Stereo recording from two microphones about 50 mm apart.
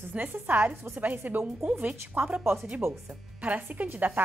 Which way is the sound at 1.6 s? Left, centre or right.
Right.